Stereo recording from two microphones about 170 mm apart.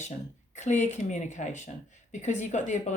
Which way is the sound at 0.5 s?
45° left (ahead or behind).